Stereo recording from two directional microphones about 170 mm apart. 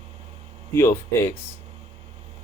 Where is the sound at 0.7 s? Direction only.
15° left (ahead or behind).